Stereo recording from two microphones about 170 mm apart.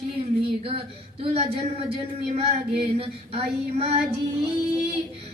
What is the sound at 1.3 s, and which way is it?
Speech, 35° right (ahead or behind).